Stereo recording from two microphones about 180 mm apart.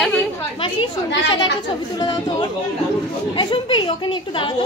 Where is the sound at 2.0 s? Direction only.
25° left (ahead or behind).